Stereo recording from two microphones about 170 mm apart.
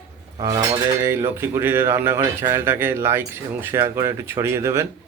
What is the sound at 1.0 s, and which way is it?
Speech, 15° right (ahead or behind).